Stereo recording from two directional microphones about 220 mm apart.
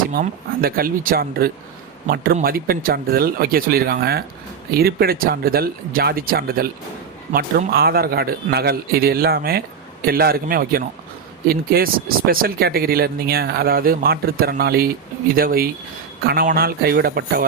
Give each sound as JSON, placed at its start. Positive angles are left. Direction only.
{"t": 0.1, "sound": "speech", "side_deg": -40}